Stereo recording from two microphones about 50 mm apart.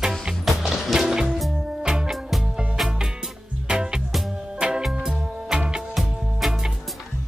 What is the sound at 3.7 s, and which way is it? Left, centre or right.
Music, centre.